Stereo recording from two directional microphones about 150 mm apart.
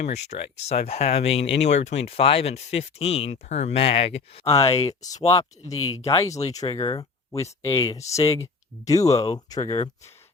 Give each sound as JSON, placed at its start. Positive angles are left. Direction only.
{"t": 0.0, "sound": "speech", "side_deg": 50}
{"t": 4.4, "sound": "speech", "side_deg": 25}
{"t": 5.1, "sound": "speech", "side_deg": 45}
{"t": 5.4, "sound": "speech", "side_deg": 20}